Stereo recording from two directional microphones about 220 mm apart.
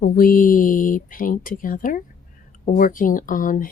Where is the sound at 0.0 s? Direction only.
40° left (ahead or behind).